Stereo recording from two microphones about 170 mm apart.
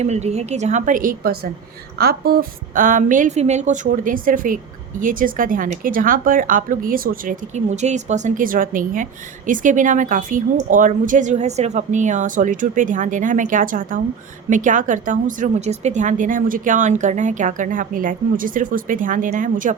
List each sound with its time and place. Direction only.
0.0 s a woman's voice: 40° right (ahead or behind)